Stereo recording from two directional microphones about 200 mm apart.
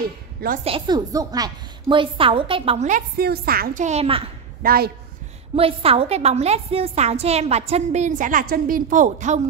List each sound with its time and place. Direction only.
0.7 s a woman's voice: 25° right (ahead or behind)
4.6 s speech: 50° right (ahead or behind)
5.6 s a woman's voice: 30° right (ahead or behind)